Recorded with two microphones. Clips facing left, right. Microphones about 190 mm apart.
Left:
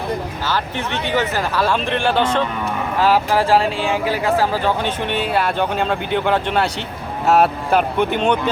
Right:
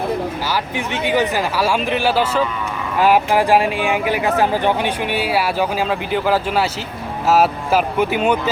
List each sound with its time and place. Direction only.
1.0 s speech: 15° right (ahead or behind)
5.1 s speech: 5° right (ahead or behind)